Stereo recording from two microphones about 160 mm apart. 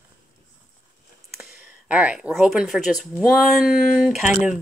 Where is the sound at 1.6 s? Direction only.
10° right (ahead or behind).